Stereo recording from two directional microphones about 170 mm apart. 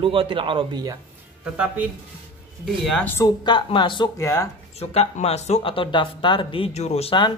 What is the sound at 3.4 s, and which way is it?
Speech, 30° left (ahead or behind).